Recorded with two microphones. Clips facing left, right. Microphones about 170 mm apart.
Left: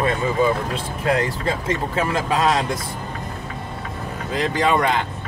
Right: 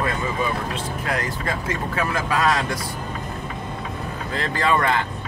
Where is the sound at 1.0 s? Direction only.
25° left (ahead or behind).